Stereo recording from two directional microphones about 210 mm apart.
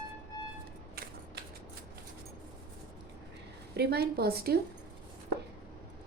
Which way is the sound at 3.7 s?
50° right (ahead or behind).